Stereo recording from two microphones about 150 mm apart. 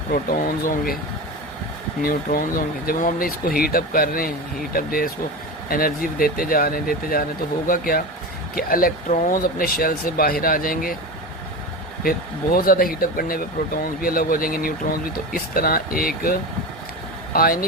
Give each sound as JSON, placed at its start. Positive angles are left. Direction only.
{"t": 0.1, "sound": "speech", "side_deg": 65}
{"t": 2.0, "sound": "speech", "side_deg": 70}
{"t": 12.5, "sound": "speech", "side_deg": 75}